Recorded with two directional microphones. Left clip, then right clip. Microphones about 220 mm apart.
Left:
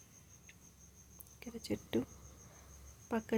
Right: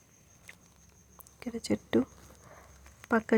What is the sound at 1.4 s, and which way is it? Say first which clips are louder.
Speech: right 9 dB; 20° right (ahead or behind).